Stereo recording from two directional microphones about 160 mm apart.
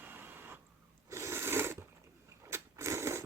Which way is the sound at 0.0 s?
15° right (ahead or behind).